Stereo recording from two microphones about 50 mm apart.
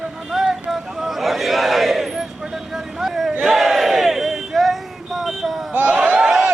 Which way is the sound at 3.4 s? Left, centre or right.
Centre.